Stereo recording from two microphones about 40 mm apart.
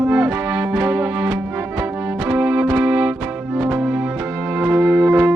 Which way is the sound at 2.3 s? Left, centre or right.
Right.